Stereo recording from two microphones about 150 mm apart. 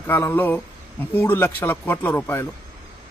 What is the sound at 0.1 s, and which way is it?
A man's voice, 15° left (ahead or behind).